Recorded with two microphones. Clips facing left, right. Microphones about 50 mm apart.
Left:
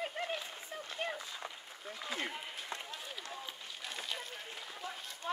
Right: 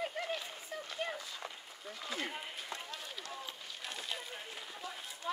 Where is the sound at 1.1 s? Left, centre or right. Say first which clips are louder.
Even; centre.